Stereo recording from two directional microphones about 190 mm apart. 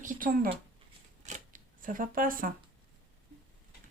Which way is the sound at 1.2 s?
40° right (ahead or behind).